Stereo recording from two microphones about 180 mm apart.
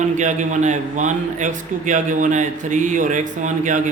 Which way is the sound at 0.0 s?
40° right (ahead or behind).